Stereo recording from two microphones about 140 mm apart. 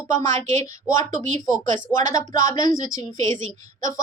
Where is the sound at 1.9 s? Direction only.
20° left (ahead or behind).